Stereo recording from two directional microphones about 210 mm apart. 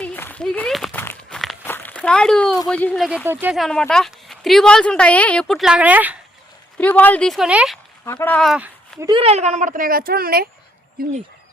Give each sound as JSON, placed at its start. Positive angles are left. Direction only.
{"t": 0.0, "sound": "a sound", "side_deg": 10}
{"t": 2.6, "sound": "speech", "side_deg": 5}
{"t": 6.7, "sound": "speech", "side_deg": 5}
{"t": 8.0, "sound": "speech", "side_deg": 10}
{"t": 9.0, "sound": "speech", "side_deg": -25}